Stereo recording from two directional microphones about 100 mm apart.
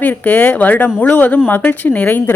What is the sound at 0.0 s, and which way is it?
A woman's voice, 20° left (ahead or behind).